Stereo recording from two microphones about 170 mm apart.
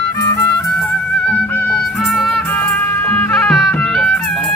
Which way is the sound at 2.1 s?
Centre (ahead or behind).